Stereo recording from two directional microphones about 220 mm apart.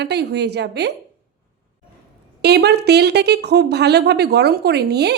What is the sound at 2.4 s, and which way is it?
Speech, 50° right (ahead or behind).